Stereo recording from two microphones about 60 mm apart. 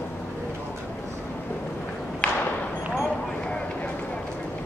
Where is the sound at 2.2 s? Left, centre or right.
Centre.